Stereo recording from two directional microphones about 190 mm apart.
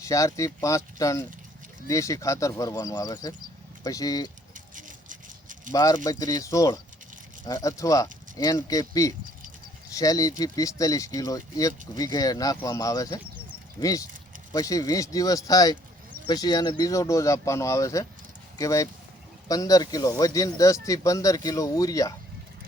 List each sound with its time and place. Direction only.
0.0 s speech: 15° left (ahead or behind)
4.5 s rattle: 45° right (ahead or behind)
5.7 s speech: 20° left (ahead or behind)